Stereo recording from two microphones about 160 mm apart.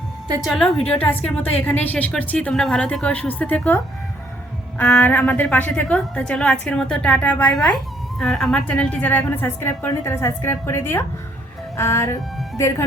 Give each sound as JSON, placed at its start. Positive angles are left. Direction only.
{"t": 0.4, "sound": "a woman's voice", "side_deg": 0}
{"t": 4.8, "sound": "a woman's voice", "side_deg": 10}